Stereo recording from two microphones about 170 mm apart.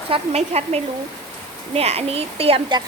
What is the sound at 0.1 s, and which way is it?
Speech, 40° right (ahead or behind).